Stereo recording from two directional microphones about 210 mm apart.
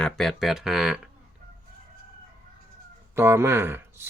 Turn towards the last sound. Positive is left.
turn(degrees=-10)  # may be behind; listen again after turning